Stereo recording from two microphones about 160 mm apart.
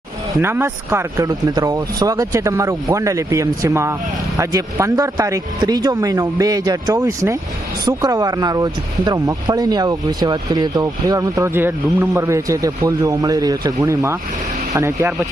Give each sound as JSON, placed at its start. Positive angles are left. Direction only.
{"t": 0.4, "sound": "speech", "side_deg": -15}